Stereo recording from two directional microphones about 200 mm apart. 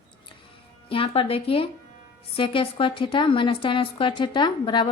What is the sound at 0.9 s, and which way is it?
A woman's voice, 25° left (ahead or behind).